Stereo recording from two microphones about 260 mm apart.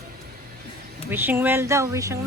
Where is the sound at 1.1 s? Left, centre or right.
Centre.